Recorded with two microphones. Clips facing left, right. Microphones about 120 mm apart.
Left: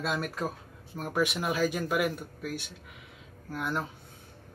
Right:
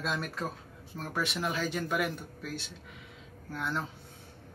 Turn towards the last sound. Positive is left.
turn(degrees=15)  # may be behind; listen again after turning